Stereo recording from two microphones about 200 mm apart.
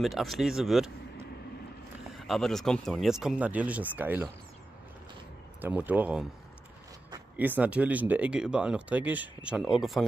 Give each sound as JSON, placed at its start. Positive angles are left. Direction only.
{"t": 0.0, "sound": "speech", "side_deg": 0}
{"t": 5.6, "sound": "speech", "side_deg": -5}
{"t": 7.3, "sound": "speech", "side_deg": -10}